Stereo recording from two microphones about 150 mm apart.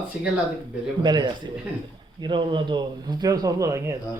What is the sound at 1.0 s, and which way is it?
A man's voice, 30° right (ahead or behind).